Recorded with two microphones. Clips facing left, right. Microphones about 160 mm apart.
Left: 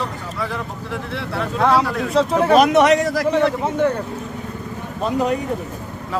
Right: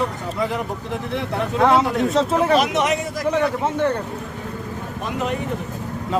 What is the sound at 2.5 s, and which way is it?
Speech, 55° left (ahead or behind).